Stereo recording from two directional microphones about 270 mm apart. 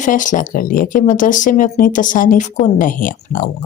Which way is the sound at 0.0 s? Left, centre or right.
Left.